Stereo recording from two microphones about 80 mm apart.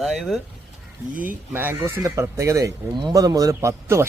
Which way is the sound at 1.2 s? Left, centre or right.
Right.